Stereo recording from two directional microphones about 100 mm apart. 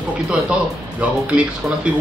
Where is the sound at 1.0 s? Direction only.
10° right (ahead or behind).